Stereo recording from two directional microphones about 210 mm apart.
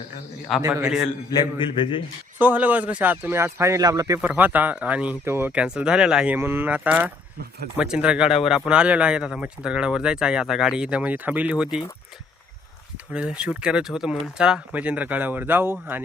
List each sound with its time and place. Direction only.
0.6 s speech: 15° right (ahead or behind)
1.4 s a man's voice: 25° left (ahead or behind)
2.4 s speech: 10° right (ahead or behind)
13.1 s speech: 5° right (ahead or behind)